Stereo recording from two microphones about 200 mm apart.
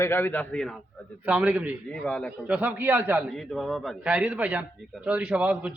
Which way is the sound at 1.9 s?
5° left (ahead or behind).